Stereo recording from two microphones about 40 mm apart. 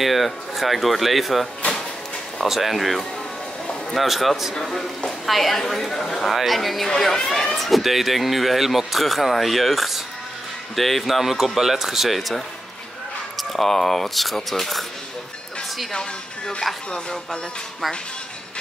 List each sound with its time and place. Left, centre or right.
0.0 s speech: centre
4.6 s speech: centre
6.3 s speech: centre
15.9 s speech: left